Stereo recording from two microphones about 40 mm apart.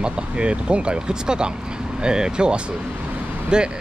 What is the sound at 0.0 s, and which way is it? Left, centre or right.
Speech, right.